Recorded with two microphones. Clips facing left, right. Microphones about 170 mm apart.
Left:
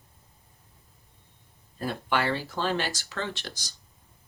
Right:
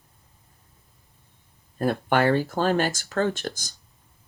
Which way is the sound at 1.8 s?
50° right (ahead or behind).